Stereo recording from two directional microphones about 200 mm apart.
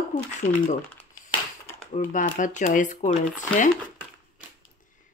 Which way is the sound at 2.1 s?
40° left (ahead or behind).